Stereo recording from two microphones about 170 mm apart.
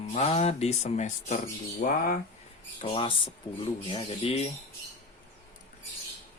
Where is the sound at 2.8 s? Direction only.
30° left (ahead or behind).